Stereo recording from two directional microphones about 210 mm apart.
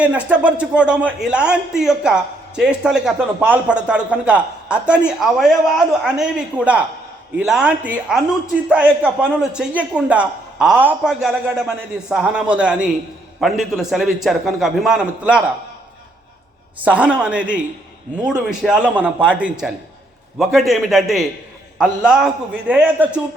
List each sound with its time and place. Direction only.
0.0 s a man's voice: 5° right (ahead or behind)
9.4 s a man's voice: 5° right (ahead or behind)
16.8 s a man's voice: 5° right (ahead or behind)